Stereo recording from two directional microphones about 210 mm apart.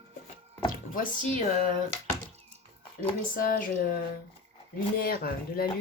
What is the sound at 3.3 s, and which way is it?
Speech, 40° left (ahead or behind).